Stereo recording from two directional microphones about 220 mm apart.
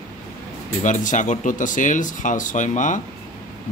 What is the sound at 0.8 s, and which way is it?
Speech, 35° left (ahead or behind).